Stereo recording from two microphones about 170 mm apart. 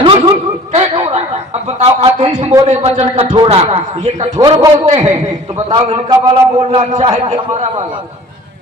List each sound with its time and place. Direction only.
0.0 s a sound: 35° right (ahead or behind)
1.8 s a man's voice: 40° right (ahead or behind)
4.4 s a man's voice: 25° right (ahead or behind)
4.9 s speech: 40° right (ahead or behind)
5.5 s a man's voice: 25° right (ahead or behind)
6.9 s speech: 45° right (ahead or behind)